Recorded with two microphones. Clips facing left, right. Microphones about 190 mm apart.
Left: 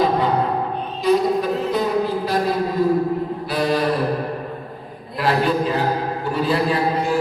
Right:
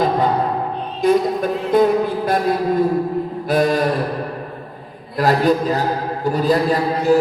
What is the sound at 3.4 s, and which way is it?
Mantra, 45° right (ahead or behind).